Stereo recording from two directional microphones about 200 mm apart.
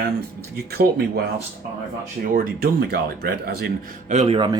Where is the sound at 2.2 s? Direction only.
45° right (ahead or behind).